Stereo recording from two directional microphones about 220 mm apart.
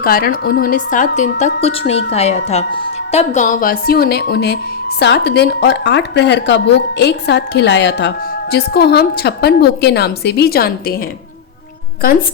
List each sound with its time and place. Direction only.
0.0 s a woman's voice: 40° left (ahead or behind)